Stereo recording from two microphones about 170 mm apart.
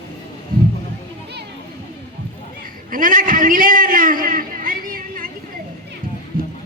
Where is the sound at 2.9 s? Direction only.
55° right (ahead or behind).